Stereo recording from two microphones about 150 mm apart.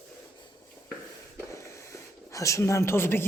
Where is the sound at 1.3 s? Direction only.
20° left (ahead or behind).